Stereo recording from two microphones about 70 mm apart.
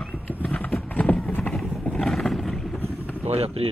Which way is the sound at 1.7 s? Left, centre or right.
Centre.